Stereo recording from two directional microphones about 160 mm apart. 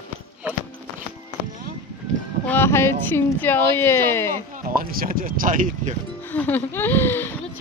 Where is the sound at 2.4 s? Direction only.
15° left (ahead or behind).